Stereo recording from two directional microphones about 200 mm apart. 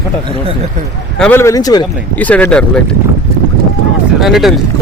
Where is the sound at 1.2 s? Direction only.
10° left (ahead or behind).